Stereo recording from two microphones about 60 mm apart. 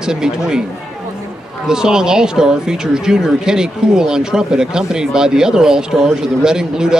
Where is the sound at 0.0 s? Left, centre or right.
Centre.